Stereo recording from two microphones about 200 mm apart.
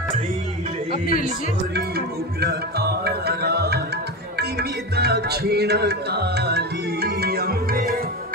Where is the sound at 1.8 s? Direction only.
55° right (ahead or behind).